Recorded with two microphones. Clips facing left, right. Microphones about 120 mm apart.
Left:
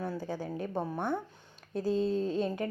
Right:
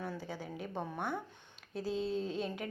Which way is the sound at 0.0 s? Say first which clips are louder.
Left 6 dB; 40° left (ahead or behind).